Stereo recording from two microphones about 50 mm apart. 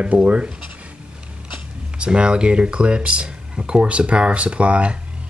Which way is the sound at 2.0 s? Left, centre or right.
Centre.